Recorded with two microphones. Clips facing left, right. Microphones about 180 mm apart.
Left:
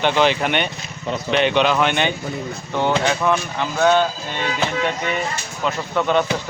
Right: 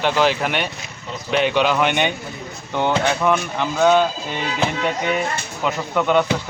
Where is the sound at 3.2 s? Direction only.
10° right (ahead or behind).